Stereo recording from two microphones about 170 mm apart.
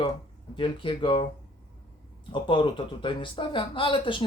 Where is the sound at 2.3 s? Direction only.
30° left (ahead or behind).